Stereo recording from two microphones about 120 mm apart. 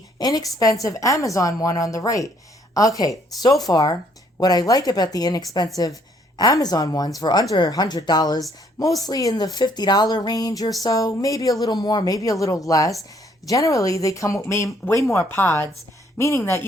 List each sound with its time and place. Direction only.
0.2 s speech: 30° left (ahead or behind)